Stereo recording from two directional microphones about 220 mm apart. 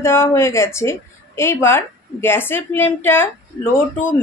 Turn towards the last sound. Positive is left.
turn(degrees=10)  # may be behind; listen again after turning